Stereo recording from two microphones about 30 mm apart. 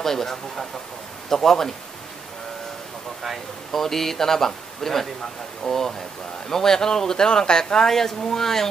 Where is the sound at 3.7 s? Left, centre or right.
Centre.